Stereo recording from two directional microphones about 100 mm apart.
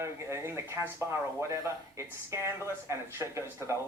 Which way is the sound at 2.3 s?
30° right (ahead or behind).